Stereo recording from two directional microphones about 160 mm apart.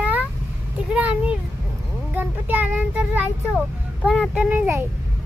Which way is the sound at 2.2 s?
10° right (ahead or behind).